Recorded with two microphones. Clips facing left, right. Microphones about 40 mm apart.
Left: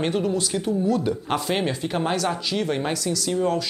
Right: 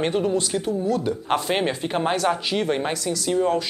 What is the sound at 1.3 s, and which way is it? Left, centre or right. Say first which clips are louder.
Speech: right 4 dB; centre.